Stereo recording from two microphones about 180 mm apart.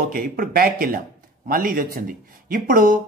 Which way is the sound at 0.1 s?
55° right (ahead or behind).